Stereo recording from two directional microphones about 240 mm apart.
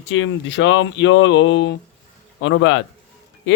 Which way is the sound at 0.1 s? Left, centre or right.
Left.